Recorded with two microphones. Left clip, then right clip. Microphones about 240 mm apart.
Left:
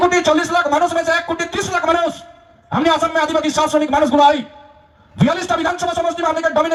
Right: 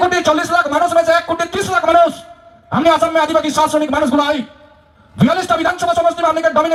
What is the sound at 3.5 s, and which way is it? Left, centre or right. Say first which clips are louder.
A man's voice: right 1 dB; left.